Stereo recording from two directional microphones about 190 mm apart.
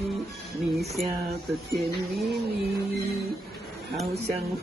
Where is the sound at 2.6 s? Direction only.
60° right (ahead or behind).